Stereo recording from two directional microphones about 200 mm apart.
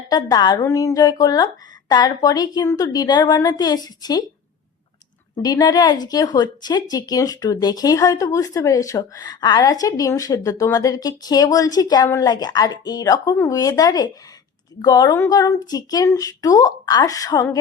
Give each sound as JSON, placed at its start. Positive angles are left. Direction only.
{"t": 0.1, "sound": "speech", "side_deg": 20}
{"t": 5.4, "sound": "speech", "side_deg": 20}